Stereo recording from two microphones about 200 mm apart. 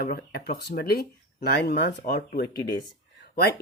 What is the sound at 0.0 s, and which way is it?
Speech, 50° left (ahead or behind).